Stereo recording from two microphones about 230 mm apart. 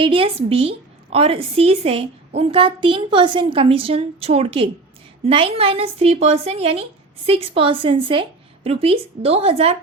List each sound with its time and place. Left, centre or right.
0.0 s a woman's voice: right